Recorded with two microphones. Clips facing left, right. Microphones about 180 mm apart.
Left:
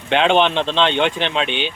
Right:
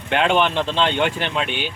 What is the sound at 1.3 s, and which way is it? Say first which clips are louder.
Speech: left 3 dB; 65° left (ahead or behind).